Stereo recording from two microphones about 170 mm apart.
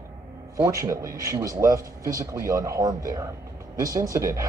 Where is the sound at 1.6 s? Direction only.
20° right (ahead or behind).